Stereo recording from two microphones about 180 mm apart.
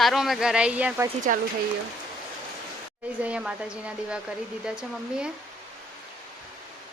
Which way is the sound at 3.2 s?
5° right (ahead or behind).